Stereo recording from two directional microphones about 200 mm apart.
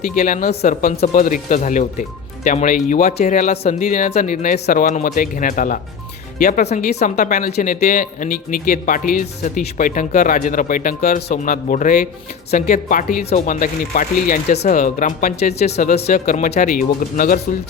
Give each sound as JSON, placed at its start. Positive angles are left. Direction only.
{"t": 0.2, "sound": "speech", "side_deg": 45}
{"t": 15.7, "sound": "speech", "side_deg": 55}
{"t": 16.0, "sound": "speech", "side_deg": 40}